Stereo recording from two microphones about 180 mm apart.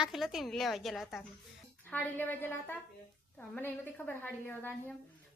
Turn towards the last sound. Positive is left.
turn(degrees=10)  # may be behind; listen again after turning